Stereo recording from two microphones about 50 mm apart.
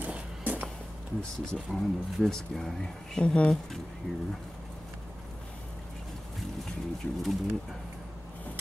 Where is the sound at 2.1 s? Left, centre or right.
Centre.